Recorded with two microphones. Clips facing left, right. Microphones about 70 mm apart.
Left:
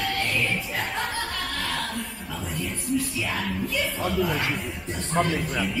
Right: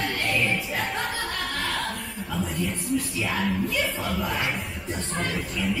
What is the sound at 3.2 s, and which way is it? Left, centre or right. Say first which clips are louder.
Speech: right 2 dB; centre.